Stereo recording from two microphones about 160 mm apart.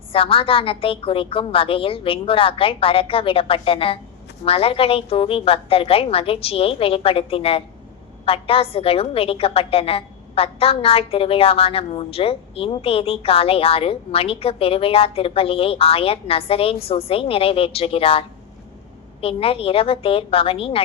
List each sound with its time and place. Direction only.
0.1 s a woman's voice: 35° left (ahead or behind)